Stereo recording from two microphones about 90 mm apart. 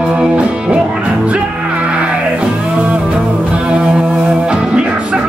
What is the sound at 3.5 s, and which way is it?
Music, 10° right (ahead or behind).